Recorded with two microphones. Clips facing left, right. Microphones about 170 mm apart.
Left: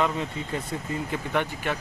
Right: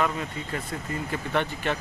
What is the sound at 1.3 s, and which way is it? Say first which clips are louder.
Speech: right 1 dB; 10° left (ahead or behind).